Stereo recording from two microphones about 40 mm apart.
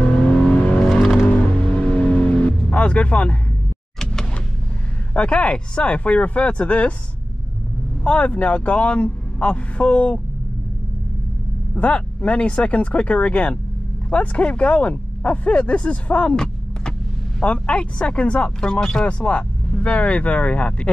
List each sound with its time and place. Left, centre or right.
0.2 s vehicle: left
4.0 s power windows: centre
5.1 s a man's voice: left
8.0 s a man's voice: left
11.7 s a man's voice: left
17.4 s a man's voice: left
18.6 s speech: centre
19.0 s a man's voice: left